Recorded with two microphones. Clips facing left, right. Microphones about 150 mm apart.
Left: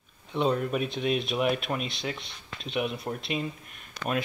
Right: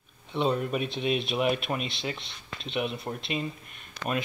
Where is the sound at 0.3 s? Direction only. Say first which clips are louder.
Left 1 dB; centre (ahead or behind).